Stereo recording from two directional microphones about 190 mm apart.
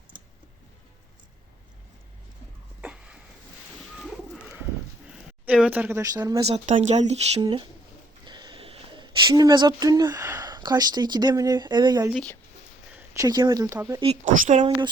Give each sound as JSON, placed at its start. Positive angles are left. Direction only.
{"t": 2.8, "sound": "a sound", "side_deg": -5}
{"t": 3.9, "sound": "bird", "side_deg": 0}
{"t": 5.5, "sound": "speech", "side_deg": -5}
{"t": 6.4, "sound": "speech", "side_deg": -35}
{"t": 7.4, "sound": "speech", "side_deg": -25}
{"t": 12.1, "sound": "speech", "side_deg": 5}
{"t": 13.0, "sound": "speech", "side_deg": -20}
{"t": 14.3, "sound": "speech", "side_deg": -45}